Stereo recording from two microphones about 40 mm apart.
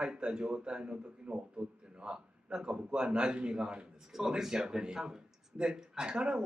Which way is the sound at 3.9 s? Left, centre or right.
Centre.